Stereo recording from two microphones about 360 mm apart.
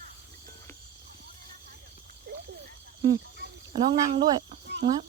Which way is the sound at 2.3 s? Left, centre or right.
Right.